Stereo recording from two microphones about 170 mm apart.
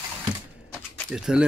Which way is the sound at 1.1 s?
5° right (ahead or behind).